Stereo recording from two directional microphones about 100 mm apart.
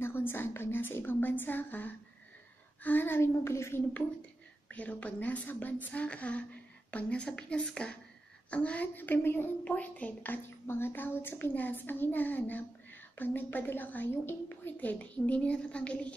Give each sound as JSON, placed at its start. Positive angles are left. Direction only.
{"t": 0.0, "sound": "a woman's voice", "side_deg": 20}
{"t": 4.6, "sound": "a woman's voice", "side_deg": 15}